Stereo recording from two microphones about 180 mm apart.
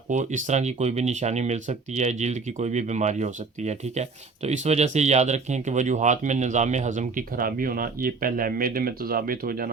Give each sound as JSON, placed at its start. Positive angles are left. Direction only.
{"t": 0.1, "sound": "speech", "side_deg": -40}